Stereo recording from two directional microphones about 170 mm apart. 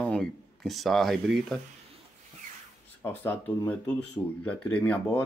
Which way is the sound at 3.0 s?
15° left (ahead or behind).